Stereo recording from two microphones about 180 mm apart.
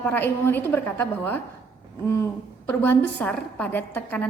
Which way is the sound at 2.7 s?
10° left (ahead or behind).